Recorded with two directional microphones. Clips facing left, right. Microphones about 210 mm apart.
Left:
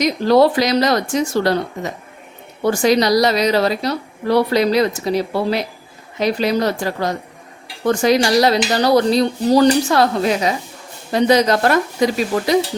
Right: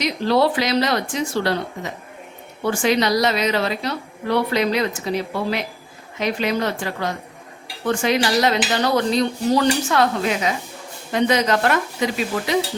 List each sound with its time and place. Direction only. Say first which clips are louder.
0.0 s a woman's voice: left 5 dB; 45° left (ahead or behind)